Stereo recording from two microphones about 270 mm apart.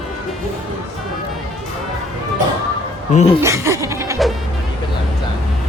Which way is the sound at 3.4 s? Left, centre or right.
Centre.